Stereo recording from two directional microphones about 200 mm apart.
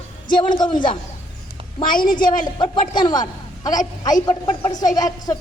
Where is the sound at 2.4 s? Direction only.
25° left (ahead or behind).